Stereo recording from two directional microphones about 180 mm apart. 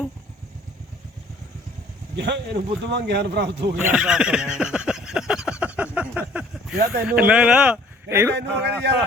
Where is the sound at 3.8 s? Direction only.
5° right (ahead or behind).